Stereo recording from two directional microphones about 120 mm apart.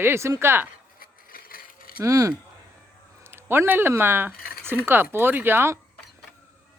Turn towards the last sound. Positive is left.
turn(degrees=-20)  # may be behind; listen again after turning